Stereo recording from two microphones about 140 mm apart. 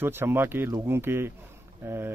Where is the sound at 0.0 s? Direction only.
15° right (ahead or behind).